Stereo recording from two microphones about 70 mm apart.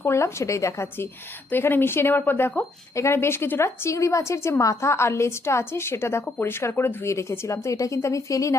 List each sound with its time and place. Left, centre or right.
0.0 s speech: left
1.5 s speech: left